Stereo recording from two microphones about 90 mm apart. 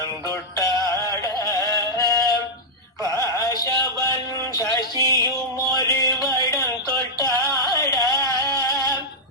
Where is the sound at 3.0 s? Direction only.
35° left (ahead or behind).